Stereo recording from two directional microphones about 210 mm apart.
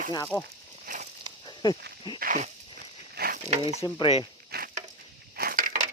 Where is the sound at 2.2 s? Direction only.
40° right (ahead or behind).